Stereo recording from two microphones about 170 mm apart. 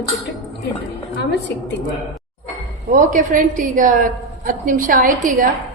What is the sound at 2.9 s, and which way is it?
A woman's voice, 50° right (ahead or behind).